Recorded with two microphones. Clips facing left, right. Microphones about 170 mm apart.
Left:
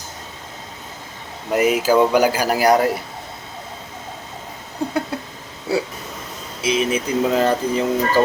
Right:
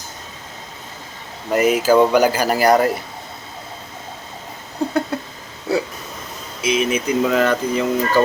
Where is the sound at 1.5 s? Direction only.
Centre (ahead or behind).